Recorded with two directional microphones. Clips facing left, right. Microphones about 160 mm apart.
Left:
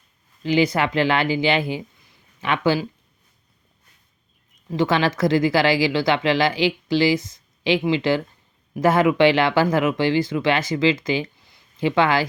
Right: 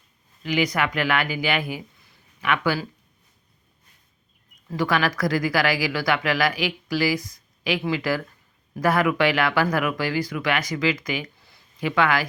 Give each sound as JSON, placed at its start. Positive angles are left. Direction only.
{"t": 0.4, "sound": "speech", "side_deg": 30}
{"t": 4.7, "sound": "speech", "side_deg": 25}